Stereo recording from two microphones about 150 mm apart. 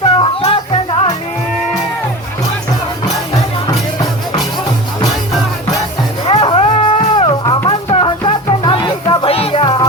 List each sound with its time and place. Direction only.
0.2 s music: 35° left (ahead or behind)
6.2 s music: 35° left (ahead or behind)